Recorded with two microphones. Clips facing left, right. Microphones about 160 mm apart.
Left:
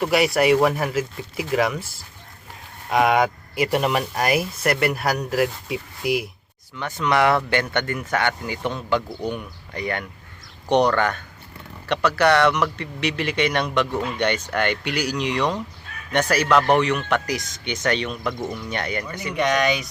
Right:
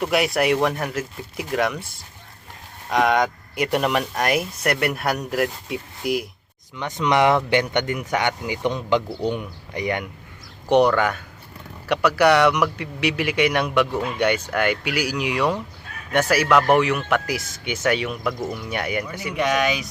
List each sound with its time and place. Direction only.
0.0 s speech: centre (ahead or behind)
6.7 s speech: 20° right (ahead or behind); by 19.9 s centre (ahead or behind)